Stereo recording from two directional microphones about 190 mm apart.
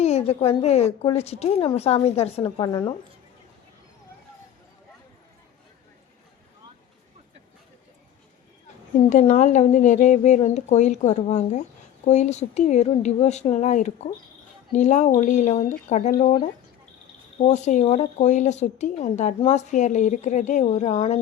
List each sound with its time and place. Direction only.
0.0 s speech: 35° left (ahead or behind)
9.0 s speech: 40° left (ahead or behind)